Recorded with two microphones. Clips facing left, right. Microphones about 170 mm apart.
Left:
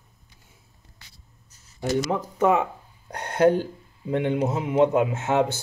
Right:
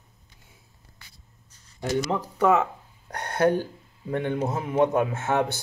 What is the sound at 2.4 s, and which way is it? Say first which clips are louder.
A man's voice: even; 15° left (ahead or behind).